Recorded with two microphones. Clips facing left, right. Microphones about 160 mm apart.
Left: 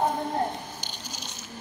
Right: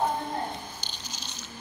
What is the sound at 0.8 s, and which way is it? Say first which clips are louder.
Squish: left 2 dB; 50° left (ahead or behind).